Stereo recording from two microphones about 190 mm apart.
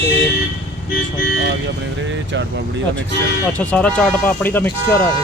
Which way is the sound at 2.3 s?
75° right (ahead or behind).